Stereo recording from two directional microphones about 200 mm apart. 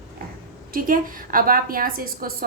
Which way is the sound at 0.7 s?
45° right (ahead or behind).